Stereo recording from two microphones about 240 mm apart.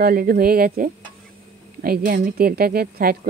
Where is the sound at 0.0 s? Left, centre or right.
Right.